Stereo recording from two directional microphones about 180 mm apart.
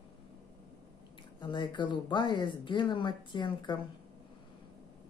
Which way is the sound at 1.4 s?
25° left (ahead or behind).